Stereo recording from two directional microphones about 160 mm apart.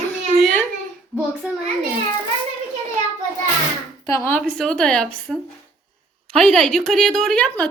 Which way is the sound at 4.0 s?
20° left (ahead or behind).